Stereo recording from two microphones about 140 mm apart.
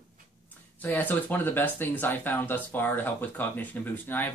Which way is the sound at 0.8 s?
15° left (ahead or behind).